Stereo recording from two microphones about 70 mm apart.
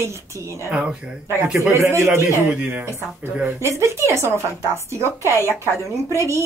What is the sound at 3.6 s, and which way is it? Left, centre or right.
A woman's voice, right.